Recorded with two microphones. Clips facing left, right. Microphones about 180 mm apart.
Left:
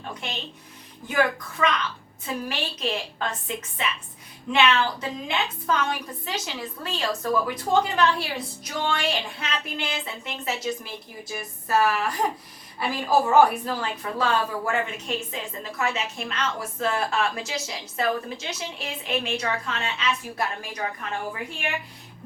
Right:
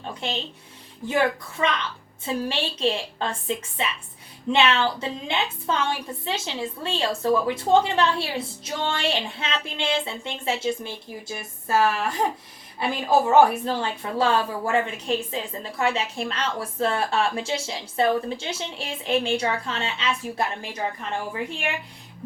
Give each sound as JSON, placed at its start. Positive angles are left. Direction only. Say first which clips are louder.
{"t": 1.0, "sound": "a woman's voice", "louder": "right 1 dB", "side_deg": -25}